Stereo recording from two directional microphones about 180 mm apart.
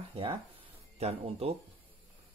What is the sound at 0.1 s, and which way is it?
Speech, 30° right (ahead or behind).